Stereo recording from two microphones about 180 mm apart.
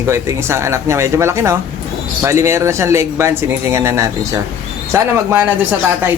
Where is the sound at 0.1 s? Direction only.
15° right (ahead or behind).